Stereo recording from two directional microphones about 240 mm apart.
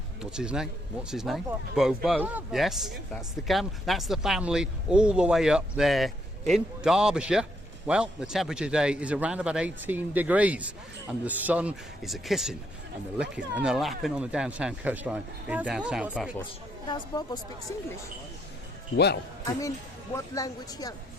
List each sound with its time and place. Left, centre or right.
0.2 s speech: centre
16.9 s speech: centre
18.9 s speech: left
20.1 s speech: centre